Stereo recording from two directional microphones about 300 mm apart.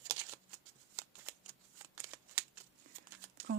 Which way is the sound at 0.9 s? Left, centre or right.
Centre.